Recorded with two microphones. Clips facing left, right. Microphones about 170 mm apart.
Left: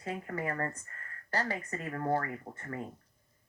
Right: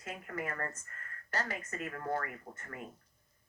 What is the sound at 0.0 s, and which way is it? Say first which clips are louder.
Speech: left 4 dB; 30° left (ahead or behind).